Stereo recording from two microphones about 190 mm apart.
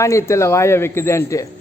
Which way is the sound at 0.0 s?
15° left (ahead or behind).